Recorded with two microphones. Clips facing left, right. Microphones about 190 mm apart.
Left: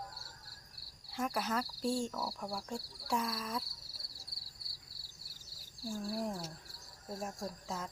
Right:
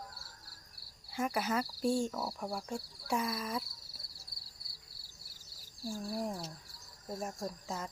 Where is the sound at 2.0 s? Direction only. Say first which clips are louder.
Right 3 dB; 15° right (ahead or behind).